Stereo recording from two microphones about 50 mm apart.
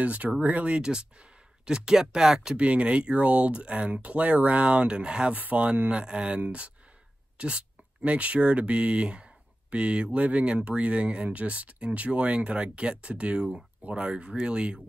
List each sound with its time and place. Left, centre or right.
0.0 s speech: right
0.7 s speech: centre
2.5 s speech: right
5.3 s speech: right